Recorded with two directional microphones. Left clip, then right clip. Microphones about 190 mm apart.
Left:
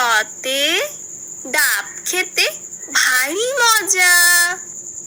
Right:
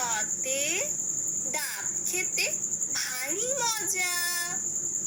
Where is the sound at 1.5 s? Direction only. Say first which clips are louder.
Left 16 dB; 45° left (ahead or behind).